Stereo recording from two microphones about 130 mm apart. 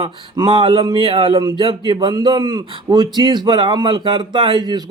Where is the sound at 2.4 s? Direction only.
25° right (ahead or behind).